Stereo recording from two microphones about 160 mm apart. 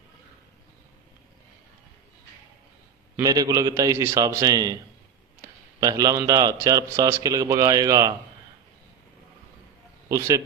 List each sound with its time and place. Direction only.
3.2 s speech: 20° right (ahead or behind)
5.8 s speech: 20° right (ahead or behind)
10.0 s a man's voice: 20° right (ahead or behind)